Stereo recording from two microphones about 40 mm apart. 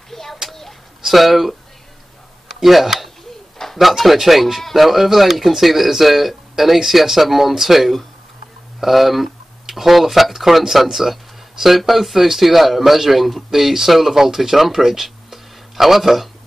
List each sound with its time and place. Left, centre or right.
0.1 s a sound: centre
1.0 s speech: centre
2.6 s speech: centre